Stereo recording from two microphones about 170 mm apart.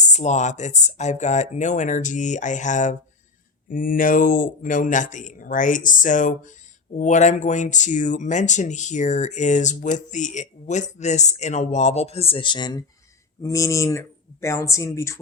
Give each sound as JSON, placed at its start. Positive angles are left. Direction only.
{"t": 0.0, "sound": "speech", "side_deg": 45}